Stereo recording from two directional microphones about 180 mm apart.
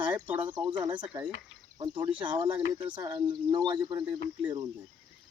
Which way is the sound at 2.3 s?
25° right (ahead or behind).